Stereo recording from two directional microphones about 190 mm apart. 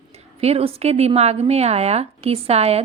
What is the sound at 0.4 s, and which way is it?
A woman's voice, 30° right (ahead or behind).